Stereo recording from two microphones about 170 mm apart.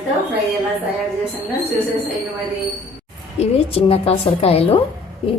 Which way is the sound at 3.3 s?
35° left (ahead or behind).